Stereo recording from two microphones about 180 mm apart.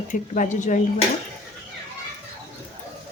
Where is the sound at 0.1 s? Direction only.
45° left (ahead or behind).